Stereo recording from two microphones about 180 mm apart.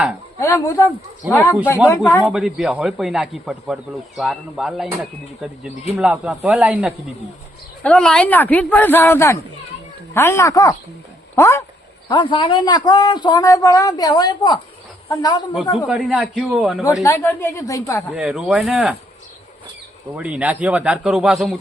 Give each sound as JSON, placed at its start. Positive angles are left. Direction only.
{"t": 0.3, "sound": "speech", "side_deg": 15}
{"t": 1.2, "sound": "speech", "side_deg": 0}
{"t": 6.0, "sound": "speech", "side_deg": -5}
{"t": 15.9, "sound": "speech", "side_deg": -5}
{"t": 17.0, "sound": "speech", "side_deg": 15}
{"t": 18.1, "sound": "speech", "side_deg": -5}
{"t": 20.1, "sound": "speech", "side_deg": -5}